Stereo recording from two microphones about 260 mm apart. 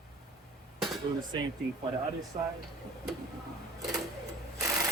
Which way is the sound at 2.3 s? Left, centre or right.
Right.